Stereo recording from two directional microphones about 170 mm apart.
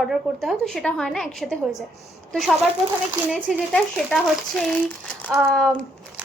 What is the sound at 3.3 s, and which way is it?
A woman's voice, centre (ahead or behind).